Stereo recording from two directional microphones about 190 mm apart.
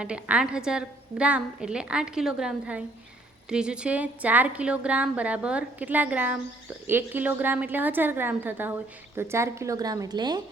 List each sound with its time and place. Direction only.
0.0 s a woman's voice: 5° right (ahead or behind); by 10.4 s 20° right (ahead or behind)